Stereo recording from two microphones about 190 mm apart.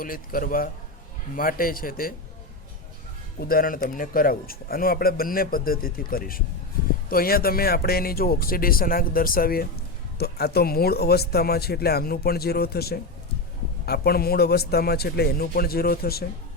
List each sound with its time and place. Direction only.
0.0 s a man's voice: 50° left (ahead or behind)
3.4 s a man's voice: 50° left (ahead or behind)